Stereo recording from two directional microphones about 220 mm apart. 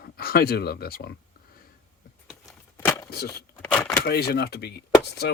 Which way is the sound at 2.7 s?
10° left (ahead or behind).